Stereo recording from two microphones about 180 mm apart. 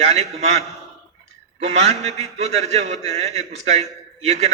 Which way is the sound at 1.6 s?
35° right (ahead or behind).